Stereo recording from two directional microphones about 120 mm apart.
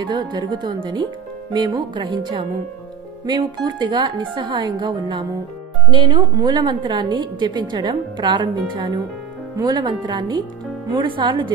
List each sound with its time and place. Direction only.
0.0 s a woman's voice: 40° right (ahead or behind)